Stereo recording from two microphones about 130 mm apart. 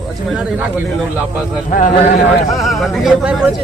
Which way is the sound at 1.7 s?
90° left.